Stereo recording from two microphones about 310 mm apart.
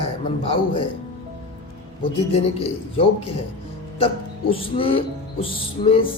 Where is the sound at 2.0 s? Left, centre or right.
Centre.